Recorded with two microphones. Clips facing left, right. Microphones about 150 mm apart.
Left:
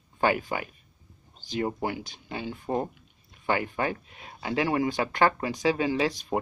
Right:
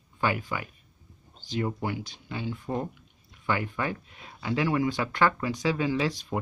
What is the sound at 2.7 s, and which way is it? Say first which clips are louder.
Speech: left 3 dB; 25° left (ahead or behind).